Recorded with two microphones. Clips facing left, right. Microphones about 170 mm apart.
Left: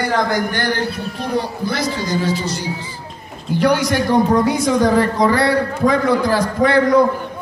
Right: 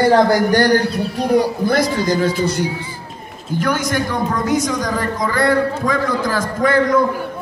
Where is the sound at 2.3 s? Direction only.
55° right (ahead or behind).